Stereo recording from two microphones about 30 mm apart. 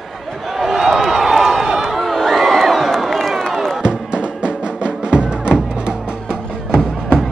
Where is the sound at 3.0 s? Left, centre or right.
Centre.